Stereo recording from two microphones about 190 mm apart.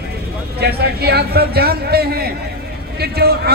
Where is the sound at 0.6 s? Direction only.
55° right (ahead or behind).